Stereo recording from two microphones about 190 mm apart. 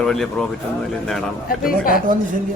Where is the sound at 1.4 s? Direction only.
50° left (ahead or behind).